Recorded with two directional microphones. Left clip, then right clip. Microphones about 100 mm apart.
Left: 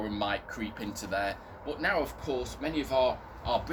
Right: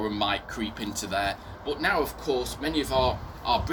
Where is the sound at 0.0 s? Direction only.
25° left (ahead or behind).